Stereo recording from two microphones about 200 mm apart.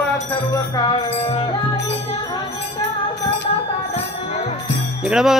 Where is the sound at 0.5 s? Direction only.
20° left (ahead or behind).